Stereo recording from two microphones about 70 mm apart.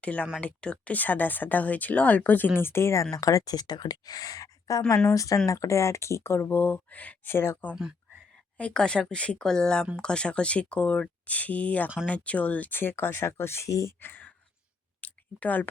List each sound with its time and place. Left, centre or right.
0.0 s speech: centre
7.3 s speech: left
8.7 s speech: centre; by 13.7 s left
13.7 s speech: left
14.0 s a sound: left